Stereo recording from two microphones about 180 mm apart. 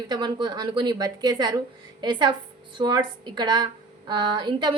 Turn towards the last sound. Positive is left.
turn(degrees=-25)  # may be behind; listen again after turning